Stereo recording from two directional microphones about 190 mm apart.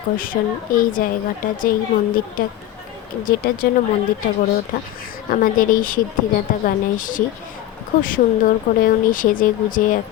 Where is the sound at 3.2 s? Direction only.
50° left (ahead or behind).